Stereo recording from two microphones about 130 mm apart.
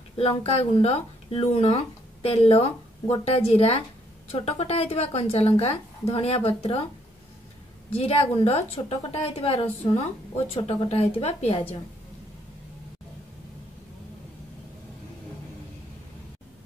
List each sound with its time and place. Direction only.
0.2 s speech: 50° left (ahead or behind)
7.9 s speech: 50° left (ahead or behind)